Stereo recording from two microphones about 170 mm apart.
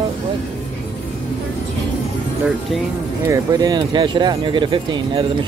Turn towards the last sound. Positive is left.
turn(degrees=-30)  # may be behind; listen again after turning